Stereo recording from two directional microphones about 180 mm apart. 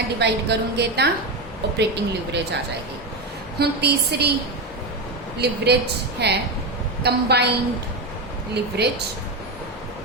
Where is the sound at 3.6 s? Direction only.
65° right (ahead or behind).